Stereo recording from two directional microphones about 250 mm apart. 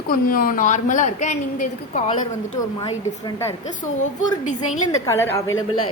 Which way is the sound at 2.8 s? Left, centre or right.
Centre.